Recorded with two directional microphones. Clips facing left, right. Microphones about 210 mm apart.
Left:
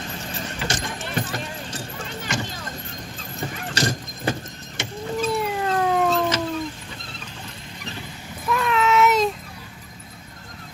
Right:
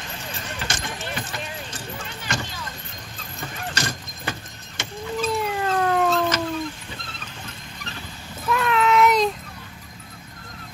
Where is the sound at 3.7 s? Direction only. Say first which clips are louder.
Left 9 dB; 40° left (ahead or behind).